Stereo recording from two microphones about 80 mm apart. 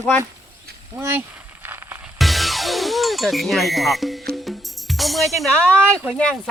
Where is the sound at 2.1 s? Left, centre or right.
Centre.